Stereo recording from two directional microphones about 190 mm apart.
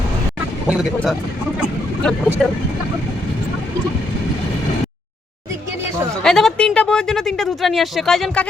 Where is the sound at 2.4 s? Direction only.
5° left (ahead or behind).